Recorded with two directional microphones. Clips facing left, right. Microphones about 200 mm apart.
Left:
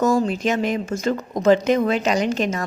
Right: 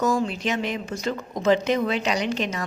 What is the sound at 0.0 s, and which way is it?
Speech, 45° left (ahead or behind).